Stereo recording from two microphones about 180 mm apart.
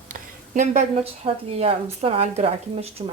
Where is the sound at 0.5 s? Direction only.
45° right (ahead or behind).